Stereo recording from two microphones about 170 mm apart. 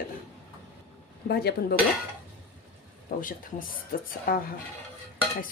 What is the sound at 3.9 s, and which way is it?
Speech, 55° left (ahead or behind).